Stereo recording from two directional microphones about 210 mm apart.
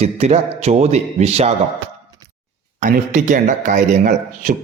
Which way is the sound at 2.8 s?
35° right (ahead or behind).